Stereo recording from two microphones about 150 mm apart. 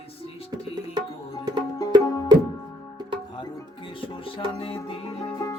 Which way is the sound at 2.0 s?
25° left (ahead or behind).